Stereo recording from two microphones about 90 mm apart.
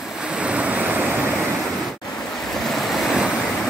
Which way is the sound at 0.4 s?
15° right (ahead or behind).